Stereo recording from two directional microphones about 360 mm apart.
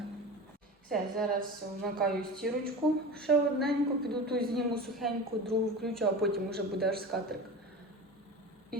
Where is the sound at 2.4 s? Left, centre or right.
Centre.